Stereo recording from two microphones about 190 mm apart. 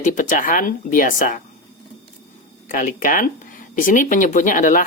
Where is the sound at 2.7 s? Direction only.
45° left (ahead or behind).